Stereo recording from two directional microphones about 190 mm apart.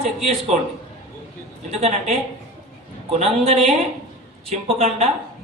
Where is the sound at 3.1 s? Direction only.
35° right (ahead or behind).